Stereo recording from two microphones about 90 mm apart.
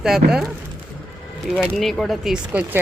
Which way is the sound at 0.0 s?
5° right (ahead or behind).